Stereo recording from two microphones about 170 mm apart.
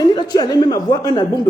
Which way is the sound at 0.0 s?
25° left (ahead or behind).